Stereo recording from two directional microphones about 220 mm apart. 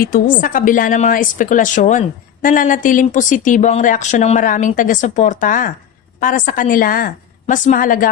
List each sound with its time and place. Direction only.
0.0 s a woman's voice: 40° left (ahead or behind)